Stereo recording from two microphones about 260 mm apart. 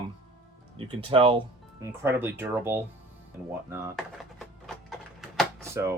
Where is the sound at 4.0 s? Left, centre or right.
Centre.